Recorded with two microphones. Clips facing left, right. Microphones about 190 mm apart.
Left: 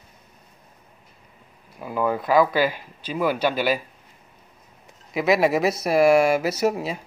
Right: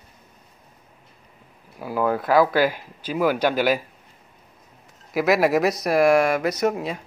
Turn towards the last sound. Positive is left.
turn(degrees=5)  # may be behind; listen again after turning